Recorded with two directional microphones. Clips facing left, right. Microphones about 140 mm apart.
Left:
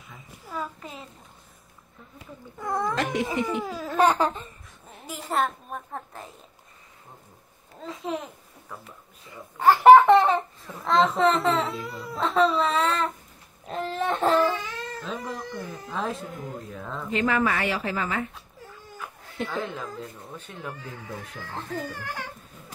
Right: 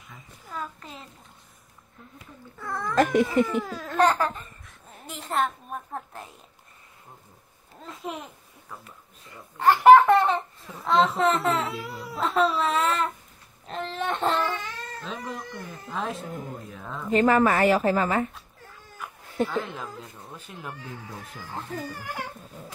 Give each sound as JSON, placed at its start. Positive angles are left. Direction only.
{"t": 0.1, "sound": "a sound", "side_deg": 10}
{"t": 2.6, "sound": "speech", "side_deg": 20}
{"t": 3.0, "sound": "a woman's voice", "side_deg": -50}
{"t": 3.4, "sound": "speech", "side_deg": 5}
{"t": 4.2, "sound": "speech", "side_deg": 25}
{"t": 4.6, "sound": "a child's voice", "side_deg": 0}
{"t": 7.8, "sound": "speech", "side_deg": 0}
{"t": 17.1, "sound": "a woman's voice", "side_deg": -40}
{"t": 19.4, "sound": "speech", "side_deg": 0}